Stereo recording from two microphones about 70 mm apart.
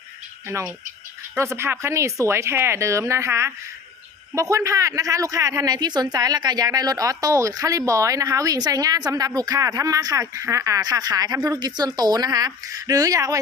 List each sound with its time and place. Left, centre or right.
0.4 s speech: right